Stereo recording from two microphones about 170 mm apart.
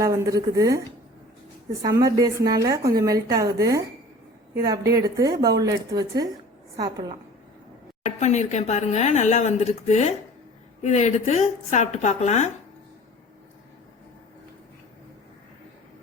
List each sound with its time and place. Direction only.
0.0 s a woman's voice: 20° right (ahead or behind)
1.8 s a woman's voice: 20° right (ahead or behind)
8.0 s a woman's voice: 45° left (ahead or behind)